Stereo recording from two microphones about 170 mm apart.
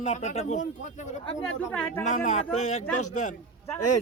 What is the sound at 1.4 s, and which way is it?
Speech, 10° left (ahead or behind).